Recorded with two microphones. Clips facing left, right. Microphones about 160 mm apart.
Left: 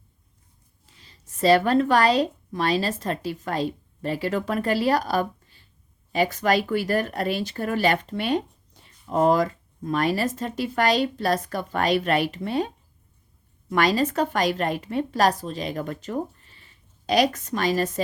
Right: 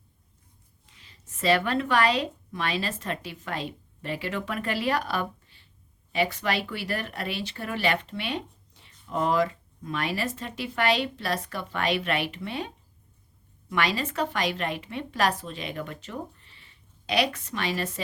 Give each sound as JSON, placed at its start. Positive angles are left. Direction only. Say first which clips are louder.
{"t": 0.9, "sound": "a woman's voice", "louder": "left 8 dB", "side_deg": 35}